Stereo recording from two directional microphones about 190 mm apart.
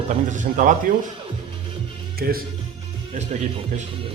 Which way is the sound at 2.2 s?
55° right (ahead or behind).